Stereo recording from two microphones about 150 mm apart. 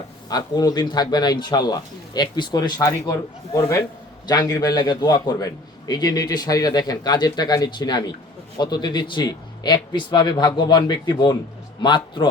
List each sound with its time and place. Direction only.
0.3 s a man's voice: 25° left (ahead or behind)